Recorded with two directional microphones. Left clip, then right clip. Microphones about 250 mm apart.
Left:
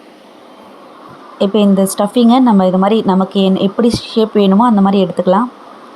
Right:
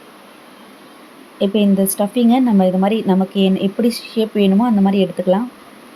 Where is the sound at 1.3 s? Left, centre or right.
Centre.